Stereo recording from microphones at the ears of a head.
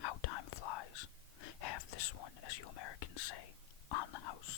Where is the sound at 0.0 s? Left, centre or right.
Left.